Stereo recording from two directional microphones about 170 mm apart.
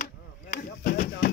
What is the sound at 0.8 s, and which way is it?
Speech, 60° left (ahead or behind).